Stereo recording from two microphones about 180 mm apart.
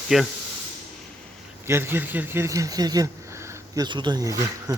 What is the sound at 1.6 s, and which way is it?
Speech, 15° right (ahead or behind).